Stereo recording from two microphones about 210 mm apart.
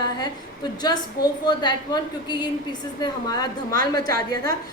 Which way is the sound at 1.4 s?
20° left (ahead or behind).